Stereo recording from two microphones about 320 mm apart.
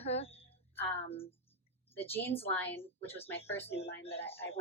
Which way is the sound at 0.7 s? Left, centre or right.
Centre.